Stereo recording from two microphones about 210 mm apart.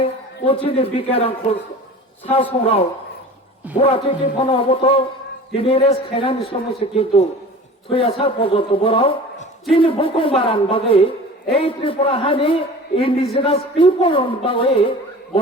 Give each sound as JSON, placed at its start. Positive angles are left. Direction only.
{"t": 0.0, "sound": "a man's voice", "side_deg": 25}